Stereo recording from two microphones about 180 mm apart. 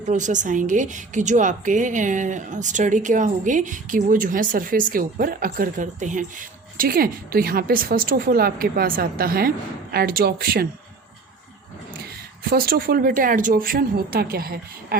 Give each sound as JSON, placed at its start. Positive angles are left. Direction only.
{"t": 0.1, "sound": "a woman's voice", "side_deg": -45}
{"t": 6.7, "sound": "a woman's voice", "side_deg": -55}
{"t": 12.5, "sound": "a woman's voice", "side_deg": -60}